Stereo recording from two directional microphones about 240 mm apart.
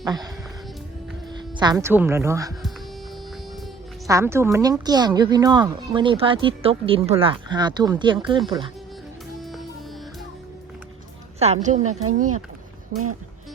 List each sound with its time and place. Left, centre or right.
0.0 s speech: centre
1.3 s speech: centre
4.1 s a woman's voice: centre
9.4 s music: centre
11.3 s speech: right